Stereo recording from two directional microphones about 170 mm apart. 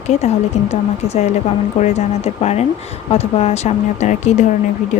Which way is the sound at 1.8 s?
40° left (ahead or behind).